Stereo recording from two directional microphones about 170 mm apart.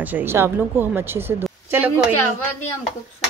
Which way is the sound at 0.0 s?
10° right (ahead or behind).